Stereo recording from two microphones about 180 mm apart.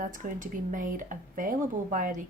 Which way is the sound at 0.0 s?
45° right (ahead or behind).